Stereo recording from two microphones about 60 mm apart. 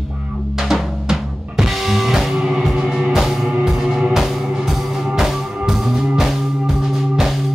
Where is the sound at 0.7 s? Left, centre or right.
Centre.